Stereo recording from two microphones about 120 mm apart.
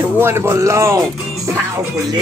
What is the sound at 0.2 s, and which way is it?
Speech, 20° right (ahead or behind).